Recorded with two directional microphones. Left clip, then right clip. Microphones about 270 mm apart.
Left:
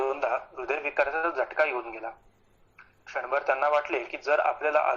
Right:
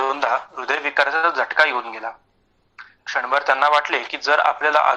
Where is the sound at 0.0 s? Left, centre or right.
Right.